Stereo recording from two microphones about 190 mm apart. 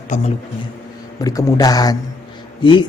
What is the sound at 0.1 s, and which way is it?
Speech, 40° left (ahead or behind).